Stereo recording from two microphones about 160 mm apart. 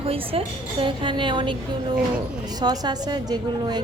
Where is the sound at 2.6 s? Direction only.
25° right (ahead or behind).